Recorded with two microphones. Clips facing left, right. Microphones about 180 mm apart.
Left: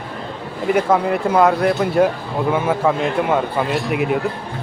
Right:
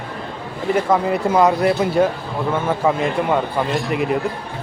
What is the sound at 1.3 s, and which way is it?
A man's voice, 5° right (ahead or behind).